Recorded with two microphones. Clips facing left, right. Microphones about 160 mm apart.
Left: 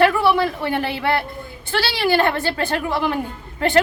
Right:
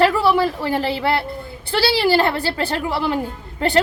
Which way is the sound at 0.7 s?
30° right (ahead or behind).